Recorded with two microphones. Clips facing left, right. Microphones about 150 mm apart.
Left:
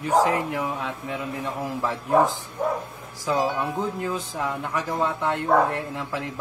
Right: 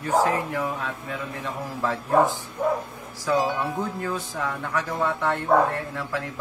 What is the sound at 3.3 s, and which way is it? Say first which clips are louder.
Speech: even; 20° left (ahead or behind).